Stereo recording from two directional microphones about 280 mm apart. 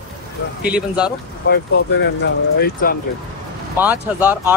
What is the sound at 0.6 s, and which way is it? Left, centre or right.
Speech, centre.